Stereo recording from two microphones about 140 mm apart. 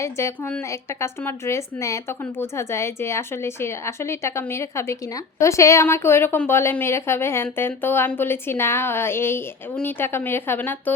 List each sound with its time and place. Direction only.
0.0 s a woman's voice: 20° left (ahead or behind)